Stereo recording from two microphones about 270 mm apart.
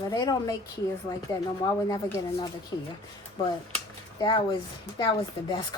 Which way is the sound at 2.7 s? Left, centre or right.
Centre.